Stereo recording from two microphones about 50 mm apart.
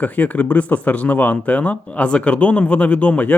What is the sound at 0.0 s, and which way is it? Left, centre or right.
Speech, left.